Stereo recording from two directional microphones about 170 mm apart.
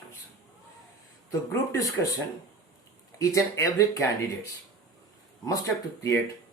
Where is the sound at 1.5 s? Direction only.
15° left (ahead or behind).